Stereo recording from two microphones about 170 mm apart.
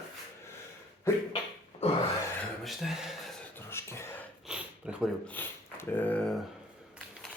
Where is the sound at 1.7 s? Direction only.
40° left (ahead or behind).